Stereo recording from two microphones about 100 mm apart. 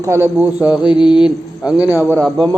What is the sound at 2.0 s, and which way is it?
Speech, 20° right (ahead or behind).